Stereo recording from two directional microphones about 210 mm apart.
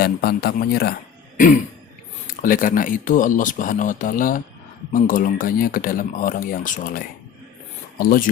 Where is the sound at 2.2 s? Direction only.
40° left (ahead or behind).